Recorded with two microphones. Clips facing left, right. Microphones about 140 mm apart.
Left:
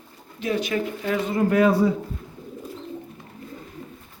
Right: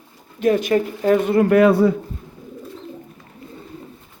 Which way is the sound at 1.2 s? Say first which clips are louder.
Right 4 dB; 65° right (ahead or behind).